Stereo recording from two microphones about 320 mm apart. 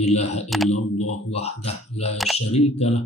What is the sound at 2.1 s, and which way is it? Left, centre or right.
Speech, centre.